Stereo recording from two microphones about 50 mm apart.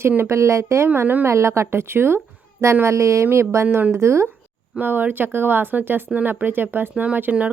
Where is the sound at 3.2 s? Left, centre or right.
Right.